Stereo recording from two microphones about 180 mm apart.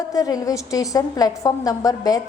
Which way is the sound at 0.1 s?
20° left (ahead or behind).